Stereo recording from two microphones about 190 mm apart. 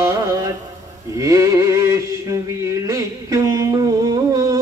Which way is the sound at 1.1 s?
15° right (ahead or behind).